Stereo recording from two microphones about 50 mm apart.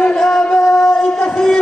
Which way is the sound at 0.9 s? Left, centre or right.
Centre.